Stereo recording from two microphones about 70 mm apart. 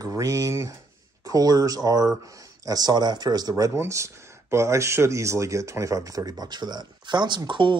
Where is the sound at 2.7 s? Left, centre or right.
Right.